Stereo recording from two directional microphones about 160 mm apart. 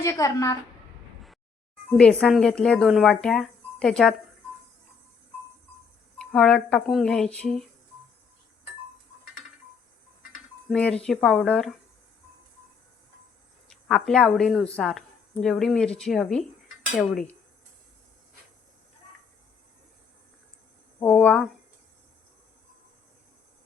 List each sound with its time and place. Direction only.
0.0 s a woman's voice: 20° left (ahead or behind)
2.0 s speech: 5° left (ahead or behind)
6.1 s speech: 5° left (ahead or behind)
10.7 s speech: 5° left (ahead or behind)
13.7 s speech: 5° left (ahead or behind)
21.0 s speech: 10° left (ahead or behind)